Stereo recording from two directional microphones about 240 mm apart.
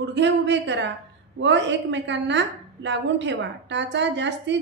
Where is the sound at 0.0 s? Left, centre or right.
Right.